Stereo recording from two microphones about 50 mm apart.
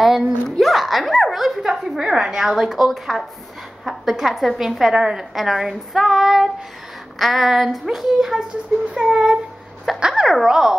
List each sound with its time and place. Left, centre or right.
0.0 s a woman's voice: centre
10.2 s speech: centre